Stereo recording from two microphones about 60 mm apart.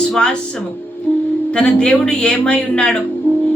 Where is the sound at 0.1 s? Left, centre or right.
Centre.